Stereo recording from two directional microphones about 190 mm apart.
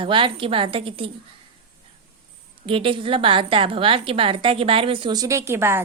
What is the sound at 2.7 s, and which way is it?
A woman's voice, 30° right (ahead or behind).